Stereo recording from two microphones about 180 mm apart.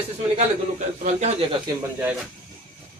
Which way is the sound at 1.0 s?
40° right (ahead or behind).